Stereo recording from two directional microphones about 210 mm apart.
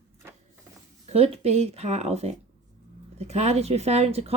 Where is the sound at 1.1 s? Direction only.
30° right (ahead or behind).